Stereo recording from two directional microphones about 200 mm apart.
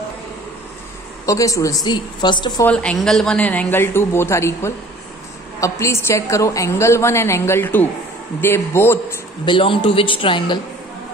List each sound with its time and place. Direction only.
1.2 s a woman's voice: 15° left (ahead or behind)
2.6 s a woman's voice: 5° left (ahead or behind)
9.5 s a man's voice: 25° left (ahead or behind)